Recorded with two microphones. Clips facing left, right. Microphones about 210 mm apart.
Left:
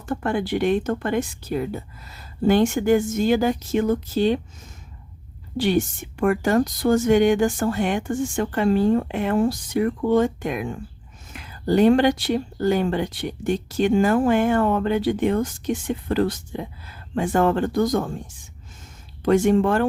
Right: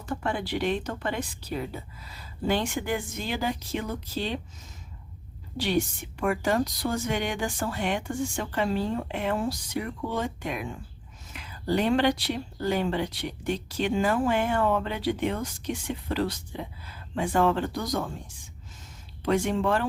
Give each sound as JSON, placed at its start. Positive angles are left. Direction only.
{"t": 0.1, "sound": "speech", "side_deg": 50}
{"t": 5.5, "sound": "speech", "side_deg": 50}
{"t": 19.2, "sound": "speech", "side_deg": 50}